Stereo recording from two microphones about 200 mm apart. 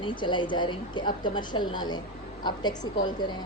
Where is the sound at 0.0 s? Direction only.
25° left (ahead or behind).